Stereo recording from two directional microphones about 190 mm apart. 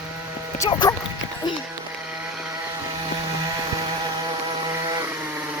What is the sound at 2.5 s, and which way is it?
Chainsaw, 15° right (ahead or behind).